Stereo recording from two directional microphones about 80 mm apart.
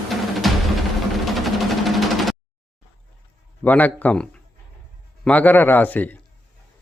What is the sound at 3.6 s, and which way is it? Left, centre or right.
Speech, centre.